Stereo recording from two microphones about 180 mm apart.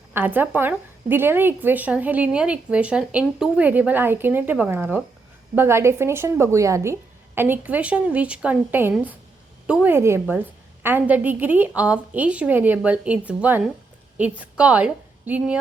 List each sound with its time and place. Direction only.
0.1 s a woman's voice: 10° right (ahead or behind)